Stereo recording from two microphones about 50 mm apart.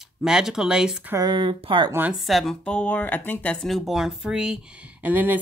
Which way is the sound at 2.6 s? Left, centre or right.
Left.